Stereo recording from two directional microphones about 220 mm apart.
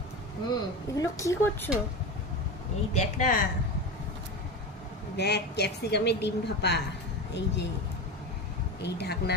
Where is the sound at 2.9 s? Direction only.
35° left (ahead or behind).